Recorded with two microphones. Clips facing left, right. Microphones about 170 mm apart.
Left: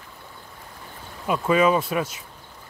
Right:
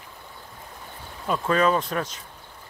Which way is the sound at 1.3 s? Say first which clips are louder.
Left 2 dB; 10° left (ahead or behind).